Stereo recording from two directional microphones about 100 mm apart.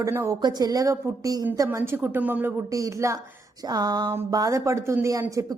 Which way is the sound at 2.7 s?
30° right (ahead or behind).